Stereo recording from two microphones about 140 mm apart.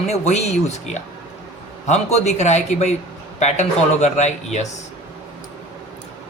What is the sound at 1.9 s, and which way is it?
A man's voice, 50° left (ahead or behind).